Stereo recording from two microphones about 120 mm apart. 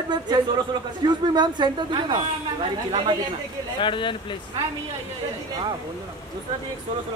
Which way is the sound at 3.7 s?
40° left (ahead or behind).